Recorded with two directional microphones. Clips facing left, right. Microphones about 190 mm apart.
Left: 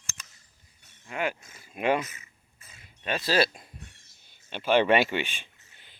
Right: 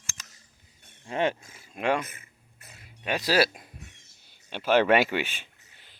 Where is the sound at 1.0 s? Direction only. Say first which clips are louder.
Right 4 dB; 30° right (ahead or behind).